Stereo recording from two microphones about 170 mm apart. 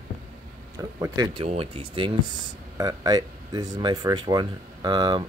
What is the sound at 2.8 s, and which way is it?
Speech, 20° right (ahead or behind).